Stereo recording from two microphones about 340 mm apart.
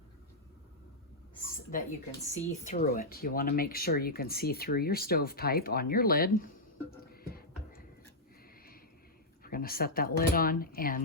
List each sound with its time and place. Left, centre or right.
1.7 s speech: left
7.1 s a sound: left
9.4 s speech: left